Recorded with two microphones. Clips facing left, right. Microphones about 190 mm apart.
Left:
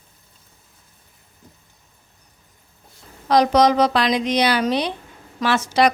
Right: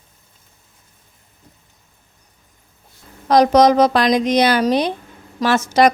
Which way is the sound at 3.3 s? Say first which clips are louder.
Right 4 dB; 45° right (ahead or behind).